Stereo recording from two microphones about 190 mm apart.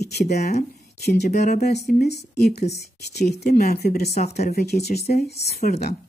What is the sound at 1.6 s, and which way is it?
Speech, 55° left (ahead or behind).